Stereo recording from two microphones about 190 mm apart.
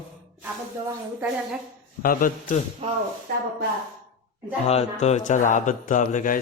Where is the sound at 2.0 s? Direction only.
45° left (ahead or behind).